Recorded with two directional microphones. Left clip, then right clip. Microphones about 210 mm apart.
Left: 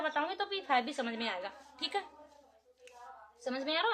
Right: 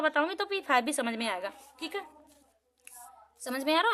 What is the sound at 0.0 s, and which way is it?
A woman's voice, 55° right (ahead or behind).